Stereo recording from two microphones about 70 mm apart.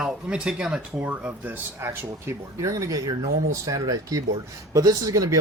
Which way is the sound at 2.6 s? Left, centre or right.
Right.